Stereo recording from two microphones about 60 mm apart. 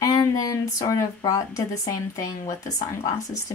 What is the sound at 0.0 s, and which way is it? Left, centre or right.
Speech, left.